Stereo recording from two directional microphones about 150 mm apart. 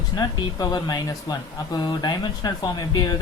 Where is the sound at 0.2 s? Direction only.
25° left (ahead or behind).